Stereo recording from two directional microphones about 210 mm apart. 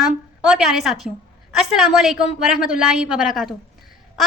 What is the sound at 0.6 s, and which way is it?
A woman's voice, centre (ahead or behind).